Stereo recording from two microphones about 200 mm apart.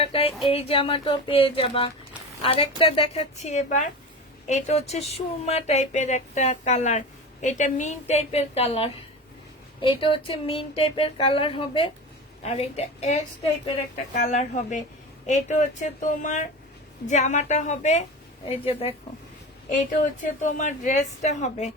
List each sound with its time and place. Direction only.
0.0 s a woman's voice: 30° left (ahead or behind)
19.7 s a woman's voice: 40° left (ahead or behind)